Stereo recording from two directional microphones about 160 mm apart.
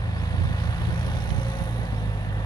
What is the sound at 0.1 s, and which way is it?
Vehicle, 25° left (ahead or behind).